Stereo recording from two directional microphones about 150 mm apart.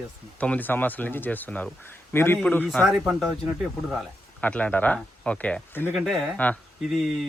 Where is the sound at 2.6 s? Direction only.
Centre (ahead or behind).